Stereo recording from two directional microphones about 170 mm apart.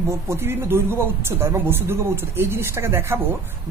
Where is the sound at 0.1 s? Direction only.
15° right (ahead or behind).